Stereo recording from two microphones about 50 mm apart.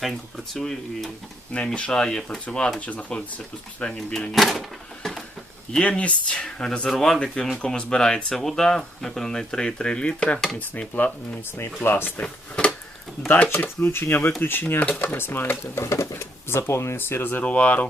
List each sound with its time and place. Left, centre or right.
0.3 s speech: centre
1.5 s speech: left
3.8 s speech: centre
6.0 s speech: left
6.3 s speech: centre
10.6 s speech: left
11.5 s speech: left
12.2 s a sound: left
13.2 s speech: left
13.8 s speech: left
15.6 s speech: left
17.4 s speech: left